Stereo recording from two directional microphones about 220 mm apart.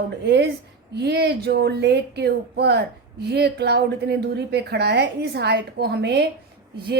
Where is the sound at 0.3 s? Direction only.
50° right (ahead or behind).